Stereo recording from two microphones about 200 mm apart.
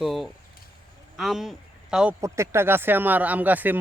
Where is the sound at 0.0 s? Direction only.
Centre (ahead or behind).